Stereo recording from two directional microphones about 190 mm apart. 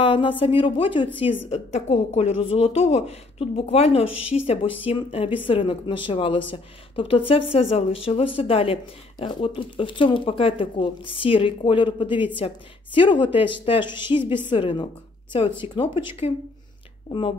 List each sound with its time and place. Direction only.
0.0 s speech: 30° left (ahead or behind)
17.1 s speech: 30° left (ahead or behind)